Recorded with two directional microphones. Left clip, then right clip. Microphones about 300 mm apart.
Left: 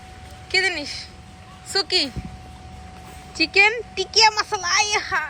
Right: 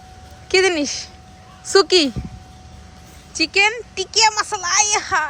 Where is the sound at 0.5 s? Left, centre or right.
Right.